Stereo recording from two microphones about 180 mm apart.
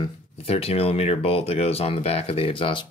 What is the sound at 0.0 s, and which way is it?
Speech, 30° left (ahead or behind).